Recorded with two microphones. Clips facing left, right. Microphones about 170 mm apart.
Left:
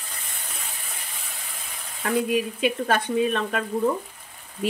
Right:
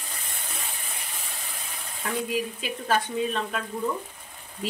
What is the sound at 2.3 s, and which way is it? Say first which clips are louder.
A woman's voice: left 6 dB; 65° left (ahead or behind).